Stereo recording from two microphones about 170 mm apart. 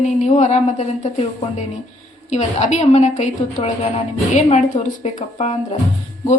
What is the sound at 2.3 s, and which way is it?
A woman's voice, 40° left (ahead or behind).